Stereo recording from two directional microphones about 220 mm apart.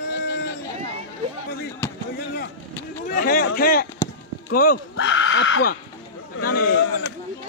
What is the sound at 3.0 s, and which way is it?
A man's voice, 40° left (ahead or behind).